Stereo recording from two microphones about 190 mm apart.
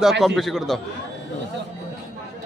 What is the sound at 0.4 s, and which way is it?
Speech, centre (ahead or behind).